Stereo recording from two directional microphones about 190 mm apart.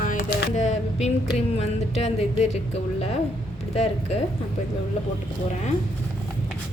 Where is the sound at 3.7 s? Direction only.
35° left (ahead or behind).